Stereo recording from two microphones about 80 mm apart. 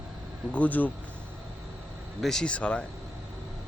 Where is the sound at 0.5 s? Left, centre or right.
Centre.